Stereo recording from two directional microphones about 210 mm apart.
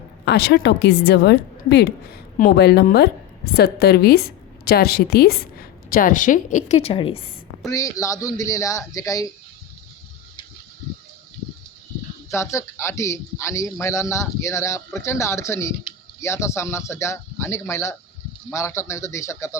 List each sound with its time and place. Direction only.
0.3 s a woman's voice: 55° left (ahead or behind); by 9.2 s 15° left (ahead or behind)
12.3 s a man's voice: 15° left (ahead or behind)